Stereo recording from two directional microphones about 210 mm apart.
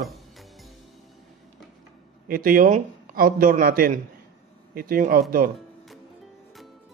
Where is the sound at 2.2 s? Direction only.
40° right (ahead or behind).